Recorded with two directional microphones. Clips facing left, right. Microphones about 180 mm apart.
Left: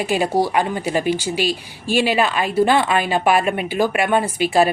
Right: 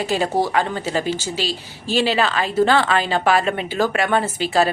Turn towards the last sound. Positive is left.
turn(degrees=15)  # may be behind; listen again after turning